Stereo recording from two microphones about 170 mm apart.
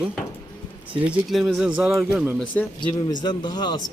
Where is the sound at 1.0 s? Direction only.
5° right (ahead or behind).